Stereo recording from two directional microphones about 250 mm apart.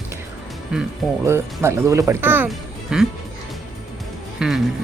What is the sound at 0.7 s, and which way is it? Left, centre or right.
Speech, centre.